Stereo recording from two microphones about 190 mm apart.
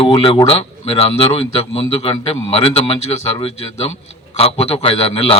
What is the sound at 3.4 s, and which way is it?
A man's voice, 30° left (ahead or behind).